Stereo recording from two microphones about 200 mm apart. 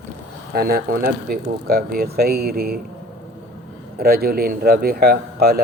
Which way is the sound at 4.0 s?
50° right (ahead or behind).